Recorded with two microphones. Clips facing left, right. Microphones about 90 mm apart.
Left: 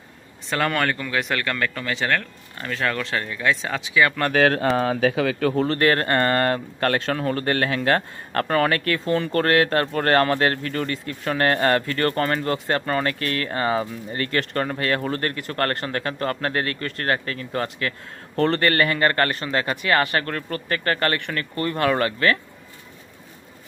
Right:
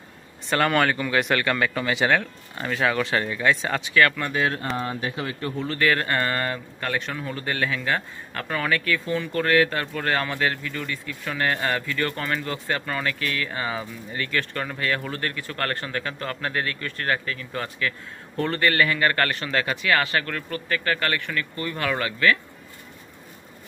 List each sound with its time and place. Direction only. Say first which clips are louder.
0.5 s speech: right 2 dB; centre (ahead or behind)
4.2 s speech: left 6 dB; 70° left (ahead or behind)
4.7 s speech: left 8 dB; 90° left
5.6 s speech: left 1 dB; 50° left (ahead or behind)
18.3 s speech: left 3 dB; 60° left (ahead or behind); by 22.4 s 40° left (ahead or behind)